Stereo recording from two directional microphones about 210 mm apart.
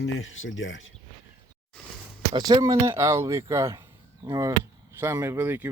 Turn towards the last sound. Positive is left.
turn(degrees=-10)  # may be behind; listen again after turning